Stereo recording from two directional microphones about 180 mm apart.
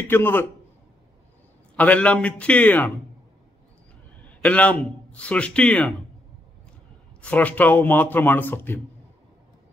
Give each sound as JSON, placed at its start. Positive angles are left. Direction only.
{"t": 0.1, "sound": "a man's voice", "side_deg": 10}
{"t": 1.8, "sound": "a man's voice", "side_deg": 5}
{"t": 4.3, "sound": "a man's voice", "side_deg": 10}
{"t": 7.2, "sound": "a man's voice", "side_deg": 5}